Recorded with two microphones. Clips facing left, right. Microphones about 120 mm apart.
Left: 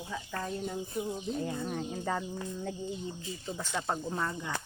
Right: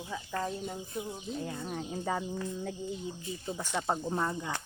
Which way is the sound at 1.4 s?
Centre (ahead or behind).